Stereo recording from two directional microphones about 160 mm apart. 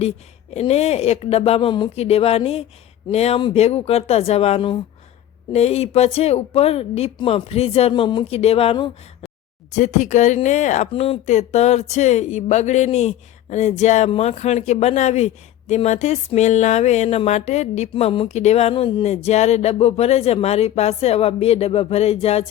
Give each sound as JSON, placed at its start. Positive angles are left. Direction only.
{"t": 0.5, "sound": "a woman's voice", "side_deg": 40}
{"t": 9.7, "sound": "speech", "side_deg": 50}